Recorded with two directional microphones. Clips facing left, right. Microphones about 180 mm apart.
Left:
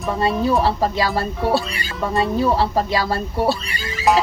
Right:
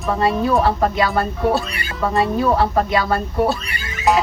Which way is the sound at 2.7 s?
30° left (ahead or behind).